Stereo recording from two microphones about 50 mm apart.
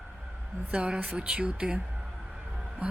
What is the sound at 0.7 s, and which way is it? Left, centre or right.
Speech, right.